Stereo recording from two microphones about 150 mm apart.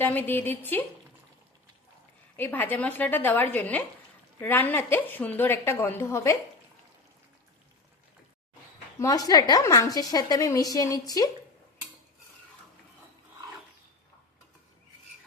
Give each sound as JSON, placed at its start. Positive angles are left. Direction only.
{"t": 0.0, "sound": "a woman's voice", "side_deg": 10}
{"t": 2.3, "sound": "a woman's voice", "side_deg": 10}
{"t": 9.0, "sound": "a woman's voice", "side_deg": 25}